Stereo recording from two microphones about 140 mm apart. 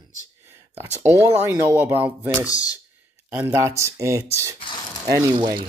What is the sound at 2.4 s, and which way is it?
Speech, 25° left (ahead or behind).